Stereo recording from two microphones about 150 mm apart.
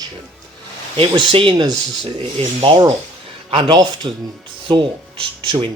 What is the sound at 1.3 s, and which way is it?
Speech, 35° right (ahead or behind).